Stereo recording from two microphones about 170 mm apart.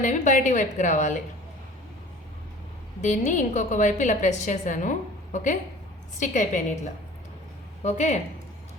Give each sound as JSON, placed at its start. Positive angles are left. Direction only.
{"t": 0.0, "sound": "a woman's voice", "side_deg": 45}
{"t": 3.0, "sound": "a woman's voice", "side_deg": 45}